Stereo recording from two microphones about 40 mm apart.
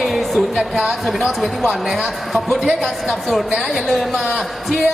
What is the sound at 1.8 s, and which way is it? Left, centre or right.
Speech, centre.